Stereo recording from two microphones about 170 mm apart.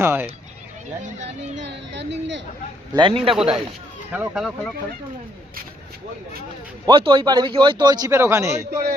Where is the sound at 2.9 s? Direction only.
30° right (ahead or behind).